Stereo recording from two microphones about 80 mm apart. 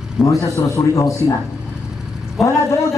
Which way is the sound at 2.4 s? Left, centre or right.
Left.